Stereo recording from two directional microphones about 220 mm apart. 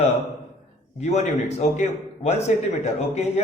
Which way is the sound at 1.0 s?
30° left (ahead or behind).